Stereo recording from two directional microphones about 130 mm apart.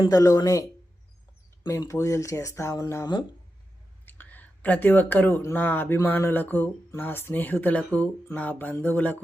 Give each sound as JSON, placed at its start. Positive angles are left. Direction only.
{"t": 0.0, "sound": "speech", "side_deg": 30}
{"t": 1.8, "sound": "speech", "side_deg": 25}
{"t": 4.0, "sound": "speech", "side_deg": 15}